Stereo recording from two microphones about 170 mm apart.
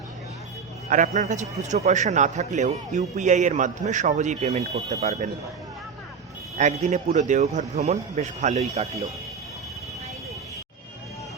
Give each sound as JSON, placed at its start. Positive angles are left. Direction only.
{"t": 0.9, "sound": "a man's voice", "side_deg": -50}
{"t": 6.6, "sound": "a man's voice", "side_deg": -45}